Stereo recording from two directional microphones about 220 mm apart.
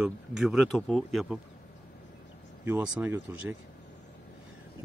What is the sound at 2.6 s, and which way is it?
Speech, 5° right (ahead or behind).